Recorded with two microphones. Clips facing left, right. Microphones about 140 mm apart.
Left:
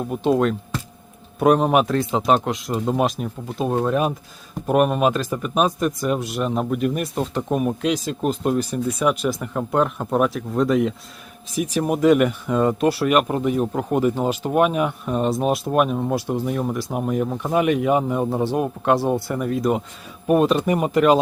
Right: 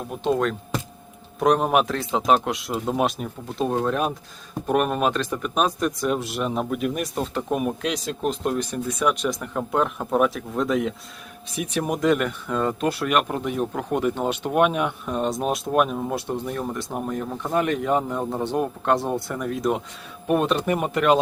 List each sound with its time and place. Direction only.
0.1 s speech: 5° left (ahead or behind)